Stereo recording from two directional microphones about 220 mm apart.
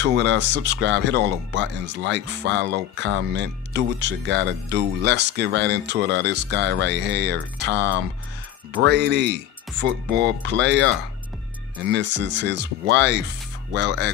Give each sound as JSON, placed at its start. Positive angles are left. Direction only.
{"t": 0.0, "sound": "speech", "side_deg": -50}